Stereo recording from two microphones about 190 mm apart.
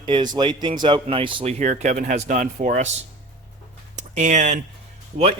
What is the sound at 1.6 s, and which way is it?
Speech, 40° right (ahead or behind).